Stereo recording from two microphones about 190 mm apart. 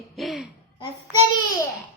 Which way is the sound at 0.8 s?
20° left (ahead or behind).